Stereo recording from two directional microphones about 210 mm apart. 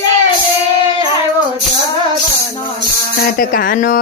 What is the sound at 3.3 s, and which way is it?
Speech, 45° left (ahead or behind).